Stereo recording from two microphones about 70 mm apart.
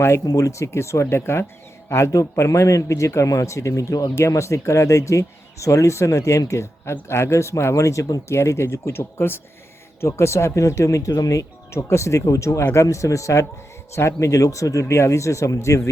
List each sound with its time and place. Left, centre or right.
0.3 s a man's voice: left